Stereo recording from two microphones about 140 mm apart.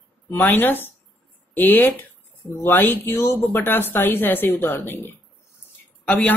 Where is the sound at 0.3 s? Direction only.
15° left (ahead or behind).